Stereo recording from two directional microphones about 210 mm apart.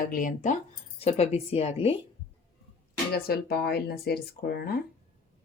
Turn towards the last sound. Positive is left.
turn(degrees=50)  # may be behind; listen again after turning